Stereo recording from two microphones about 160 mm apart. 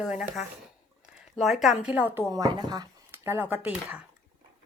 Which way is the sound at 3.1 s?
15° right (ahead or behind).